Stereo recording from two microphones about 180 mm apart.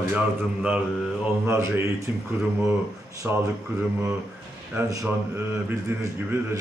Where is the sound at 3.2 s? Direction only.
10° right (ahead or behind).